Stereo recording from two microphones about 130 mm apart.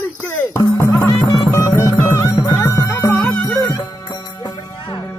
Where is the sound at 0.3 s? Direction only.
20° left (ahead or behind).